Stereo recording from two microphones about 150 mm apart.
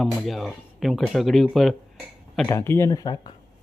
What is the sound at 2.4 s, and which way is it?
Speech, 15° left (ahead or behind).